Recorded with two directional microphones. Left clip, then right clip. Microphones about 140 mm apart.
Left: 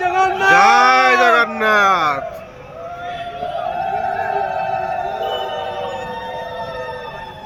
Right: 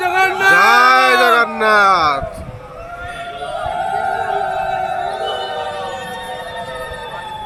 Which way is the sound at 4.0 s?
10° left (ahead or behind).